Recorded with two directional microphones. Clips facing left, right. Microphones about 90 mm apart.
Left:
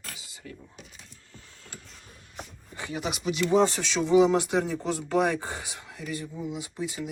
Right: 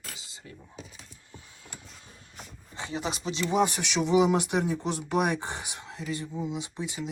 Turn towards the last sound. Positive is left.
turn(degrees=-20)  # may be behind; listen again after turning